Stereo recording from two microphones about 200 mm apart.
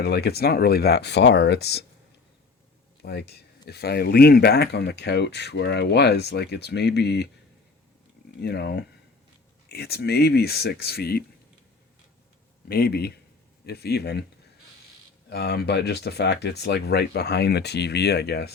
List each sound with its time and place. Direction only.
0.0 s speech: 55° left (ahead or behind)
3.0 s speech: 55° left (ahead or behind)
8.4 s speech: 55° left (ahead or behind)
12.6 s speech: 50° left (ahead or behind)
15.3 s speech: 55° left (ahead or behind)